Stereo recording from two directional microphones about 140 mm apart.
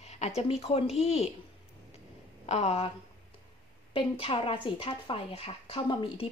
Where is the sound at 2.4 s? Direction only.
50° left (ahead or behind).